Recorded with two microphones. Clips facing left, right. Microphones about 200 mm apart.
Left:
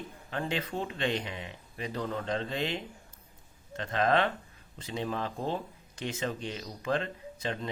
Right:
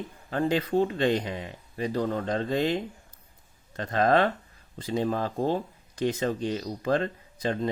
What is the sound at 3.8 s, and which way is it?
Speech, 40° right (ahead or behind).